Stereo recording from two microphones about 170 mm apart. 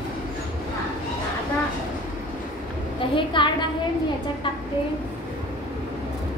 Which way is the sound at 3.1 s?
30° left (ahead or behind).